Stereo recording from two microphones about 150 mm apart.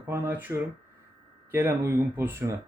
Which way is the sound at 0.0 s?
15° right (ahead or behind).